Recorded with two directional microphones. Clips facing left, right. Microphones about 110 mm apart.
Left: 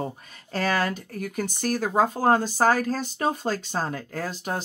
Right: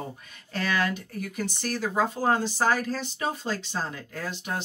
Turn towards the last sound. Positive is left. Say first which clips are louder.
# left 3 dB
turn(degrees=40)  # may be behind; listen again after turning